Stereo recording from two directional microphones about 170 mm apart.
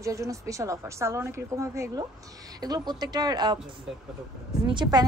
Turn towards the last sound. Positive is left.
turn(degrees=-25)  # may be behind; listen again after turning